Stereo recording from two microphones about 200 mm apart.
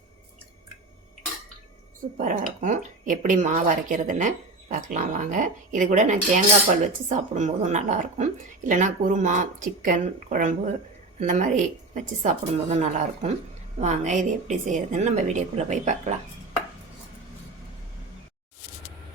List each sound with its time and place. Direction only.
2.1 s speech: 40° right (ahead or behind)